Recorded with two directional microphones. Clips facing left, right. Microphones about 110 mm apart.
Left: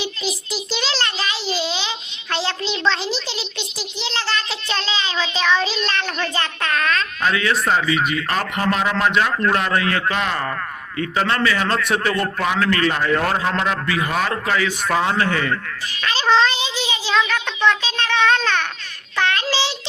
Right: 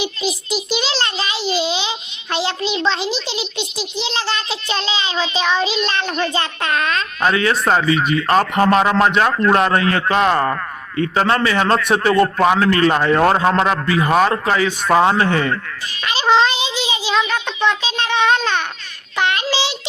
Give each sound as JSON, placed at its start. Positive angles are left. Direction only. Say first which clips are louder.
{"t": 0.0, "sound": "child singing", "louder": "right 4 dB", "side_deg": -90}
{"t": 0.7, "sound": "a sound", "louder": "right 2 dB", "side_deg": -25}
{"t": 3.6, "sound": "a child's voice", "louder": "right 5 dB", "side_deg": -25}
{"t": 7.2, "sound": "a man's voice", "louder": "right 6 dB", "side_deg": -40}
{"t": 16.0, "sound": "a child's voice", "louder": "right 2 dB", "side_deg": -20}